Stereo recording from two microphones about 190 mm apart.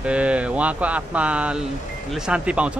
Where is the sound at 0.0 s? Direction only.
5° right (ahead or behind).